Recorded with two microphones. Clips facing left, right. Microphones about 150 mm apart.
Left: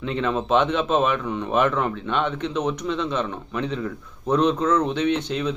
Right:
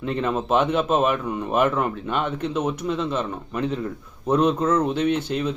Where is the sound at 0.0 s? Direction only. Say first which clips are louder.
Even; 5° right (ahead or behind).